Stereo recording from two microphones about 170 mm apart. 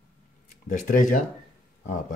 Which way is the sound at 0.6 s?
50° left (ahead or behind).